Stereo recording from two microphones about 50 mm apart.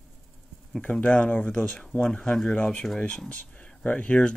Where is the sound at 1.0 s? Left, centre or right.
Left.